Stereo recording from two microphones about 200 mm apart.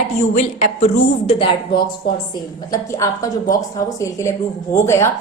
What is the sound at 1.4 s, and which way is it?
Speech, 25° left (ahead or behind).